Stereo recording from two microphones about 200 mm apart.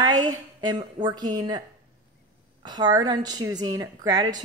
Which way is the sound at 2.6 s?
20° right (ahead or behind).